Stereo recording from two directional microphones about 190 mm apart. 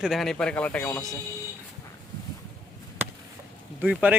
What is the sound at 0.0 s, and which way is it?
A man's voice, centre (ahead or behind).